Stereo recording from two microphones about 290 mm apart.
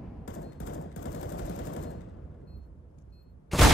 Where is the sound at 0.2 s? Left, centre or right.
Left.